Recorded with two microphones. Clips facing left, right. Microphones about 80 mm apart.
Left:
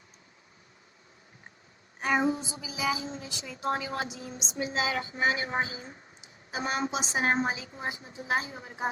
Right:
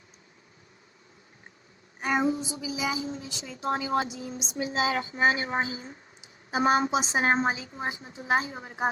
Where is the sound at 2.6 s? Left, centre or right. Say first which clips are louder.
Even; left.